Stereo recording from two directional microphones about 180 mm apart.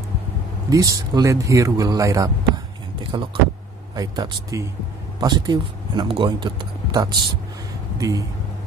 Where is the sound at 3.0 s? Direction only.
30° right (ahead or behind).